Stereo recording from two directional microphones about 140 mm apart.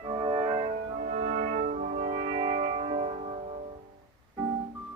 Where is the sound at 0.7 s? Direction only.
70° right (ahead or behind).